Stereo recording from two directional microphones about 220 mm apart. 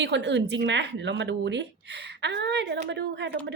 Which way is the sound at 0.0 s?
55° right (ahead or behind).